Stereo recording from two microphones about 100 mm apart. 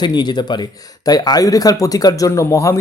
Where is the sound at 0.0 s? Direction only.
45° left (ahead or behind).